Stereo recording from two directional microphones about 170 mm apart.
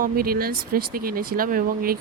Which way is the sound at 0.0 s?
60° right (ahead or behind).